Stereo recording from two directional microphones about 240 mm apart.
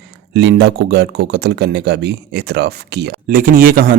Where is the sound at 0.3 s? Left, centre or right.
Right.